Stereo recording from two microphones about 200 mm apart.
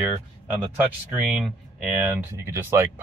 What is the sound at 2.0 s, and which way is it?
Speech, 10° right (ahead or behind).